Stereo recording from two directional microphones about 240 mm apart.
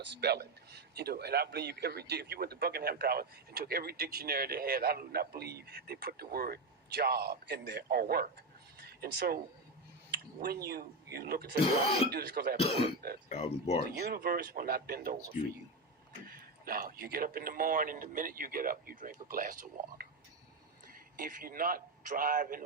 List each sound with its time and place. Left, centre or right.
0.0 s a man's voice: right
8.8 s a sound: right
10.1 s a man's voice: right
12.5 s speech: left
13.8 s a man's voice: right
16.2 s a man's voice: right
21.2 s a man's voice: right